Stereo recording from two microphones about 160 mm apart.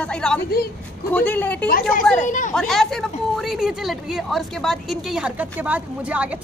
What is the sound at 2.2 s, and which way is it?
Speech, 50° left (ahead or behind).